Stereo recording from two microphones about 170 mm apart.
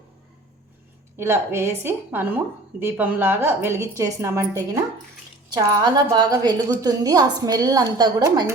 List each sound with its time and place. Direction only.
1.1 s a woman's voice: 15° right (ahead or behind)